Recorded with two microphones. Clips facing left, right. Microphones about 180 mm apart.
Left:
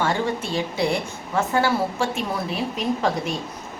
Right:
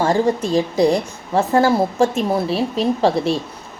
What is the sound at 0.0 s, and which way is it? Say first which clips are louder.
A woman's voice: right 7 dB; 40° right (ahead or behind).